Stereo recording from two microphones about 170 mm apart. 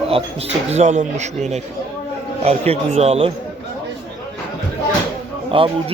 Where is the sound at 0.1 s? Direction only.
35° right (ahead or behind).